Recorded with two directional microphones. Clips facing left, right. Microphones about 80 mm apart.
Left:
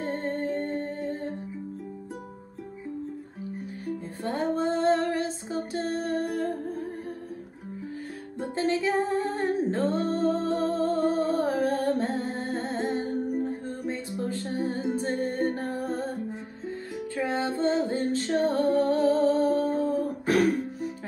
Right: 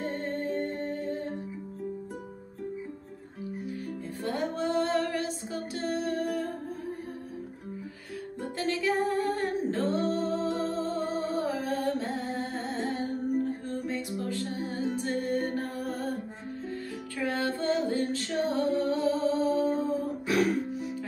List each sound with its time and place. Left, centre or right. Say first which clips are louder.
0.0 s music: left 3 dB; left
3.8 s music: left 5 dB; left
8.4 s music: left 5 dB; left